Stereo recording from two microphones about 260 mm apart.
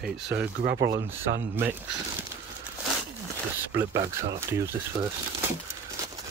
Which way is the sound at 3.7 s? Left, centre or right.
Centre.